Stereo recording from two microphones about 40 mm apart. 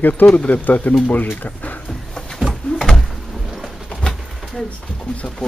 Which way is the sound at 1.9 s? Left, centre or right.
Centre.